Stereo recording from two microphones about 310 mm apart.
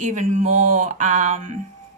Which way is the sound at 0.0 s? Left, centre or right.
Right.